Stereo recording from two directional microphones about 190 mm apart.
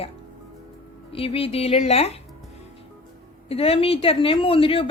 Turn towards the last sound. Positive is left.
turn(degrees=30)  # may be behind; listen again after turning